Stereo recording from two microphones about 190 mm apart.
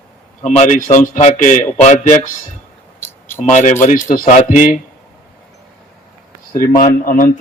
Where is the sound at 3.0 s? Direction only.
10° left (ahead or behind).